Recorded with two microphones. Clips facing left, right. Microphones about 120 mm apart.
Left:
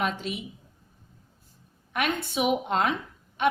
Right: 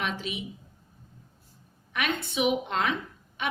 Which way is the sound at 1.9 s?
45° left (ahead or behind).